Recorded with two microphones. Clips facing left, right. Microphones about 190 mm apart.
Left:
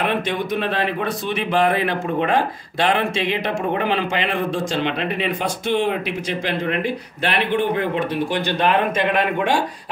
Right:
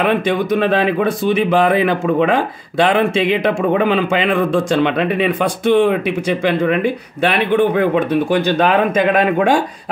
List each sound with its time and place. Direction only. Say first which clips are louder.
4.4 s speech: right 7 dB; 55° right (ahead or behind)